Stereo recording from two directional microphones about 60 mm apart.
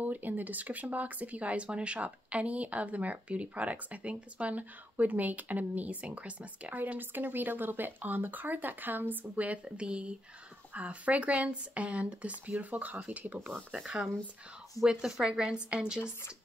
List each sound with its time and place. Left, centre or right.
0.0 s speech: right
13.7 s a woman's voice: centre